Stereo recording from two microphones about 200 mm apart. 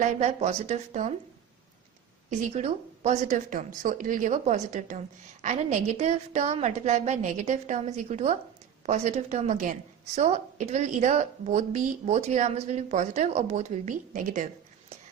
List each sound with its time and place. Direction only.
0.0 s a woman's voice: 35° right (ahead or behind)
2.5 s a woman's voice: 35° right (ahead or behind)